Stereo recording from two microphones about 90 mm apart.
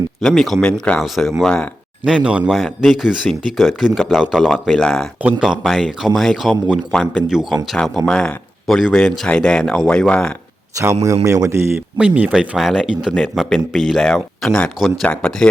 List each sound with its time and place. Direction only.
0.2 s a man's voice: 5° left (ahead or behind)
2.0 s a man's voice: 10° right (ahead or behind); by 7.3 s 10° left (ahead or behind)
7.3 s a man's voice: 5° right (ahead or behind)
10.8 s a man's voice: 35° right (ahead or behind)
11.9 s speech: 15° right (ahead or behind)
12.3 s a man's voice: centre (ahead or behind)